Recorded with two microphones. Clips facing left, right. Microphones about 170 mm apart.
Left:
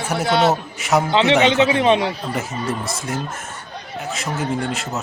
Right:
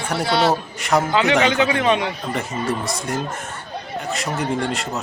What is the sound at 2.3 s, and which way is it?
Speech, centre (ahead or behind).